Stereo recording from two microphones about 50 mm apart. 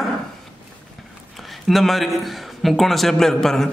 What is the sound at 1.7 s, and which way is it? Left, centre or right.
A man's voice, centre.